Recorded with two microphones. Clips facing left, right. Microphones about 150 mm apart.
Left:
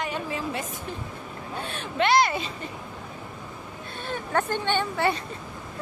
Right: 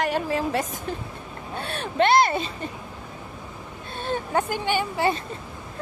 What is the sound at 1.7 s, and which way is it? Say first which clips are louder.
Speech: right 3 dB; 45° right (ahead or behind).